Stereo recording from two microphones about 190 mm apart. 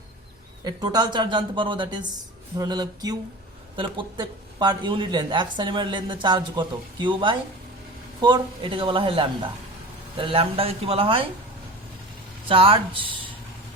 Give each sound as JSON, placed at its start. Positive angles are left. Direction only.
{"t": 0.6, "sound": "speech", "side_deg": -20}
{"t": 12.5, "sound": "speech", "side_deg": -30}